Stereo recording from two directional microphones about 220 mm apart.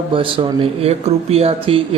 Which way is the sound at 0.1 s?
25° right (ahead or behind).